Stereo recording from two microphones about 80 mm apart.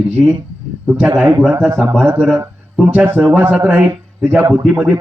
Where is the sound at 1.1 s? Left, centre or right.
Right.